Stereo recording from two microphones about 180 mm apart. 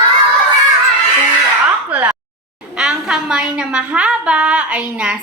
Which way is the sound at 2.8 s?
5° right (ahead or behind).